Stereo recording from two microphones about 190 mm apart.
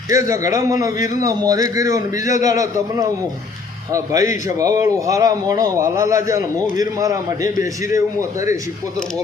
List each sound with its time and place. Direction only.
0.1 s a man's voice: 15° right (ahead or behind)